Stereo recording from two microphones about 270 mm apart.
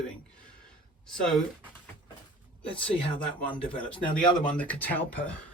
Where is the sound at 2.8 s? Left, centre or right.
Centre.